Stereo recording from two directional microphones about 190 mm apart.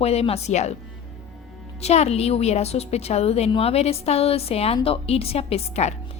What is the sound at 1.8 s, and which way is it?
A woman's voice, 35° left (ahead or behind).